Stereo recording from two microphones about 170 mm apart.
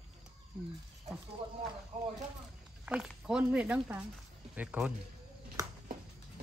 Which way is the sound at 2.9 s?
5° right (ahead or behind).